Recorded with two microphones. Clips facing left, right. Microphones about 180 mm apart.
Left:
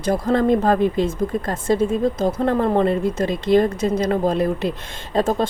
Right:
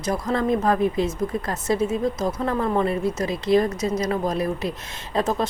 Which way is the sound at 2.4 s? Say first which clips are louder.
Left 5 dB; 55° left (ahead or behind).